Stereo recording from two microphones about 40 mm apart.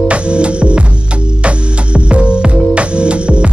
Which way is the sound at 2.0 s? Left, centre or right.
Right.